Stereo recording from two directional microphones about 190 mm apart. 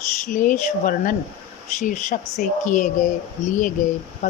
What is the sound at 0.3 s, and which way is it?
Speech, 45° left (ahead or behind).